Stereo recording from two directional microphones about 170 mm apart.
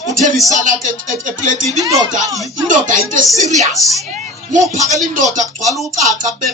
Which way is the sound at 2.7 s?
50° right (ahead or behind).